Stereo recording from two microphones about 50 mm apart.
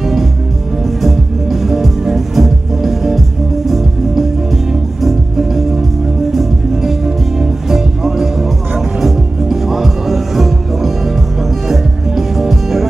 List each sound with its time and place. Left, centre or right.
0.8 s music: centre